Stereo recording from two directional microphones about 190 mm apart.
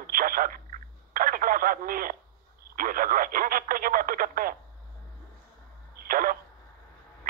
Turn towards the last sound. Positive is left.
turn(degrees=-50)  # may be behind; listen again after turning